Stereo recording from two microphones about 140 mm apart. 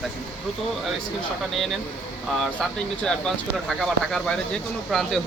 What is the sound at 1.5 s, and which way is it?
Speech, centre (ahead or behind).